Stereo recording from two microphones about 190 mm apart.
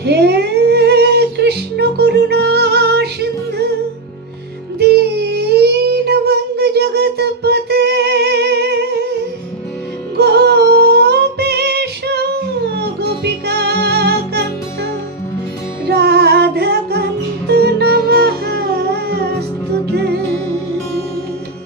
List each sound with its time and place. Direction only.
0.0 s a sound: 60° right (ahead or behind)
4.8 s child singing: 60° right (ahead or behind)
10.2 s music: 60° right (ahead or behind)
15.9 s music: 60° right (ahead or behind)